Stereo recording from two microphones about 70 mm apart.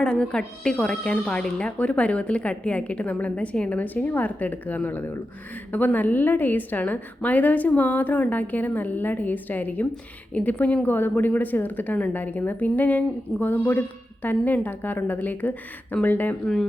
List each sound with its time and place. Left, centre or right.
0.0 s a woman's voice: centre